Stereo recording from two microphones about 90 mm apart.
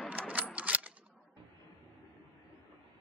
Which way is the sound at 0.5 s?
15° right (ahead or behind).